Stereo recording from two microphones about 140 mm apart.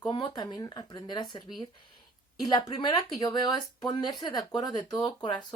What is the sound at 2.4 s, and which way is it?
Speech, 30° left (ahead or behind).